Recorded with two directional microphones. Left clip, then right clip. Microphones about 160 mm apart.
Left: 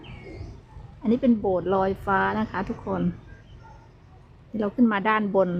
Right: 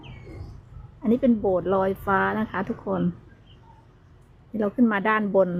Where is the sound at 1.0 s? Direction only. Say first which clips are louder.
Right 1 dB; 20° right (ahead or behind).